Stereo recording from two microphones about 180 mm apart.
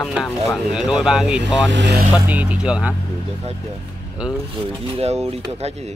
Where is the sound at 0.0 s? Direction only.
Centre (ahead or behind).